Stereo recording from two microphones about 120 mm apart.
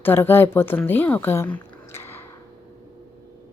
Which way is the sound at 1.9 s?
20° left (ahead or behind).